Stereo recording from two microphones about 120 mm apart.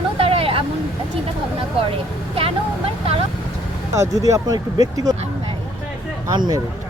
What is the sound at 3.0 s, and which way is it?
Speech, 55° right (ahead or behind).